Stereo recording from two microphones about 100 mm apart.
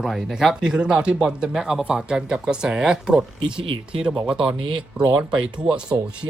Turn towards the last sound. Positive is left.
turn(degrees=-10)  # may be behind; listen again after turning